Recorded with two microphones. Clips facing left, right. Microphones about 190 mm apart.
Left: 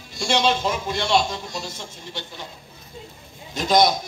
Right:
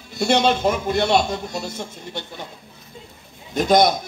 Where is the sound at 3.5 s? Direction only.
55° right (ahead or behind).